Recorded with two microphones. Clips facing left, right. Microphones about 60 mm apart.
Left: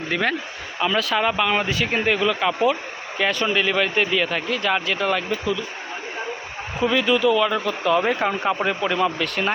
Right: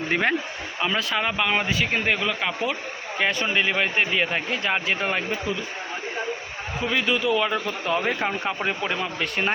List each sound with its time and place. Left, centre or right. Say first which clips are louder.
0.1 s speech: even; right
0.8 s speech: left 4 dB; centre
3.4 s speech: left 2 dB; centre
6.8 s speech: left 5 dB; centre
7.9 s speech: left 2 dB; centre